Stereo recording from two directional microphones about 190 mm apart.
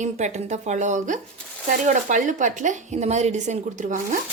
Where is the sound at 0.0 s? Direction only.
40° right (ahead or behind).